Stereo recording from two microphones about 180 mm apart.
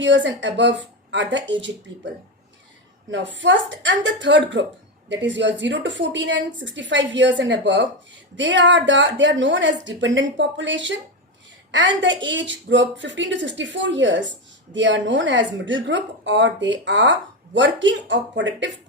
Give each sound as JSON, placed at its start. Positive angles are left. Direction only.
{"t": 0.0, "sound": "speech", "side_deg": -90}
{"t": 3.1, "sound": "speech", "side_deg": -90}